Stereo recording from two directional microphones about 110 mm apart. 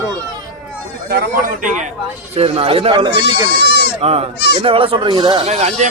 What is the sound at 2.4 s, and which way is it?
Speech, 60° right (ahead or behind).